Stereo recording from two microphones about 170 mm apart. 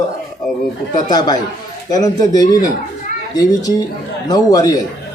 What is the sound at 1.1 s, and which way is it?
A man's voice, 25° left (ahead or behind).